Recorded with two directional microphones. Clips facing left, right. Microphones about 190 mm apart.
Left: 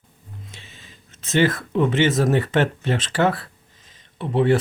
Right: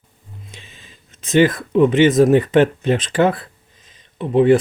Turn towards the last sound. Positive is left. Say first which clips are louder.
# right 6 dB
turn(degrees=-15)  # may be behind; listen again after turning